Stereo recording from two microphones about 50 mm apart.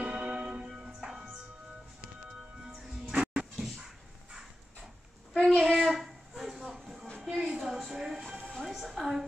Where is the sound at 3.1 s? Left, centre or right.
Centre.